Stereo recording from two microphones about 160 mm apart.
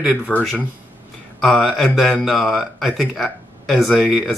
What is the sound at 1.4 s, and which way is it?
Speech, centre (ahead or behind).